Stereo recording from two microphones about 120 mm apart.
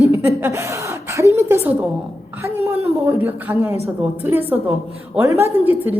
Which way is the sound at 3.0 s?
20° right (ahead or behind).